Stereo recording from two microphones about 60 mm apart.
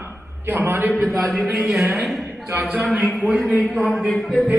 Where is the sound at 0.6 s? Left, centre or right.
Right.